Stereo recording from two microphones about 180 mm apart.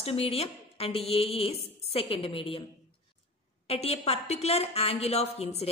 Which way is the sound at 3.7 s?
35° left (ahead or behind).